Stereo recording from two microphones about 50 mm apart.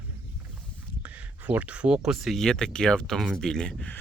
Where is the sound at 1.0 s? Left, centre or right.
Right.